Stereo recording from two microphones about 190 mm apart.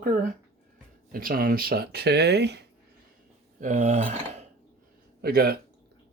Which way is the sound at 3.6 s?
40° right (ahead or behind).